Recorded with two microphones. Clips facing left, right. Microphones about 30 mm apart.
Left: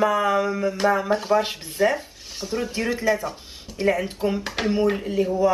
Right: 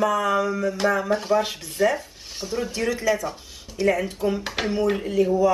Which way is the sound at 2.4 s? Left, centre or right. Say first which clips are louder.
Left 1 dB; centre.